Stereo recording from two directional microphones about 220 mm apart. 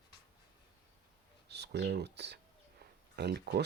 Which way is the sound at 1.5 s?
50° right (ahead or behind).